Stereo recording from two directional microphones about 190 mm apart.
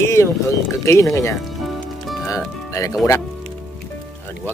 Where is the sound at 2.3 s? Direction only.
15° left (ahead or behind).